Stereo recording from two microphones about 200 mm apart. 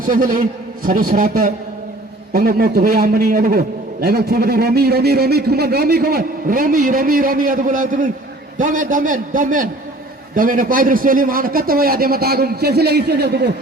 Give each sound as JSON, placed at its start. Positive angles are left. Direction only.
{"t": 0.0, "sound": "a man's voice", "side_deg": -40}